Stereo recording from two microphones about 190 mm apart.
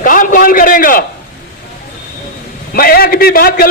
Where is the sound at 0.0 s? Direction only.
45° left (ahead or behind).